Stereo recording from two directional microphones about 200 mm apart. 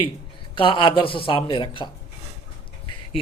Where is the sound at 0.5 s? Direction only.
25° left (ahead or behind).